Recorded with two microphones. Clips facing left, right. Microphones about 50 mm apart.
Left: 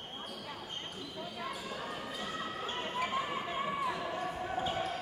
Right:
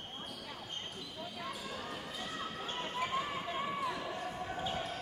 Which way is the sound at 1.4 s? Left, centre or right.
Centre.